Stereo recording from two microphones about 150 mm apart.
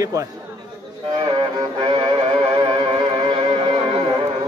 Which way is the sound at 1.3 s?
30° right (ahead or behind).